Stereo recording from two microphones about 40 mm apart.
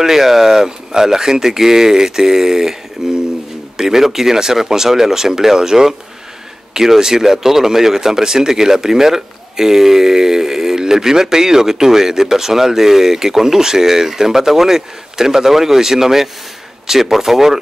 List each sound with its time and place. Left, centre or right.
0.0 s speech: centre